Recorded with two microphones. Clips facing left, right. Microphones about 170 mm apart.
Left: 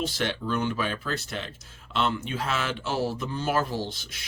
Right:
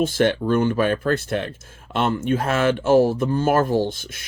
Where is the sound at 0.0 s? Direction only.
50° right (ahead or behind).